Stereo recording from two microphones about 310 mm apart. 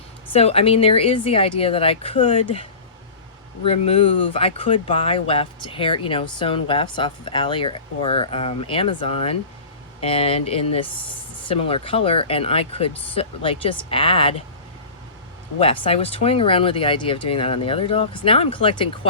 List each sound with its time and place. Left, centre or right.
0.3 s speech: centre
15.5 s speech: centre